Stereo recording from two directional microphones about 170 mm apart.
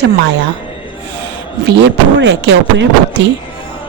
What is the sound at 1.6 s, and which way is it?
Speech, 90° right.